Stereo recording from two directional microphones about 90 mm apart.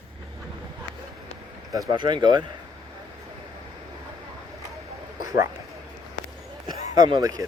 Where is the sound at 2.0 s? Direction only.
55° right (ahead or behind).